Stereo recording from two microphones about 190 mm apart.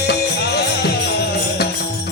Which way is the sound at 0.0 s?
60° left (ahead or behind).